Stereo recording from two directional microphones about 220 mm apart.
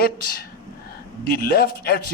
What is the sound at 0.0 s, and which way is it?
Speech, 45° left (ahead or behind).